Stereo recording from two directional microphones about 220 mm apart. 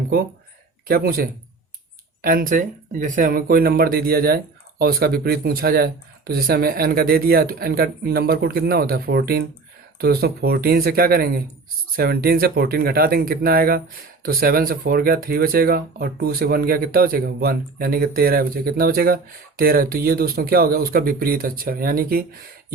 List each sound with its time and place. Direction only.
0.9 s speech: 40° right (ahead or behind)